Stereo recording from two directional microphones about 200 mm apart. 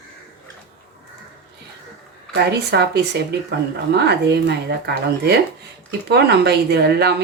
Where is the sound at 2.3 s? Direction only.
55° right (ahead or behind).